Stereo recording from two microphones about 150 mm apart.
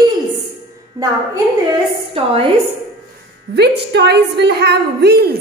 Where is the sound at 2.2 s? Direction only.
40° right (ahead or behind).